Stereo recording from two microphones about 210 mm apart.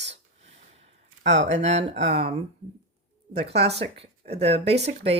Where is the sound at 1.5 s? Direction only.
30° right (ahead or behind).